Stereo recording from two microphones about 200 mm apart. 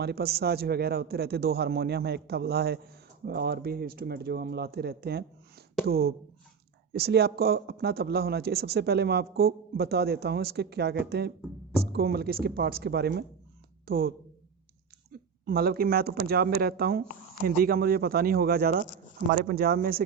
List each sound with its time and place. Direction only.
0.0 s speech: 55° right (ahead or behind)
15.4 s speech: 50° right (ahead or behind)